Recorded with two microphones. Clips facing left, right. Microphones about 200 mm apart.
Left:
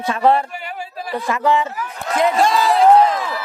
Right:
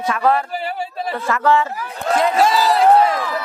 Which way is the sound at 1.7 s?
35° right (ahead or behind).